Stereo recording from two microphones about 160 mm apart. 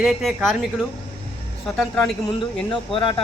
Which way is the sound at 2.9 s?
30° left (ahead or behind).